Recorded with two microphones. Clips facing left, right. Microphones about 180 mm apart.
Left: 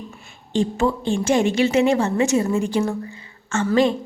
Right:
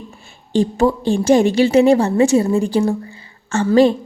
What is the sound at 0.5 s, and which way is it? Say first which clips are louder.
A woman's voice: right 5 dB; 35° right (ahead or behind).